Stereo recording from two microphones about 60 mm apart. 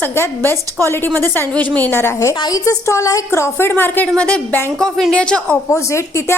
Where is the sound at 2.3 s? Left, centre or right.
Left.